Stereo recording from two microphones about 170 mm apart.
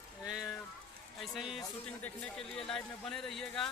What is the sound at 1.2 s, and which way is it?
A man's voice, centre (ahead or behind).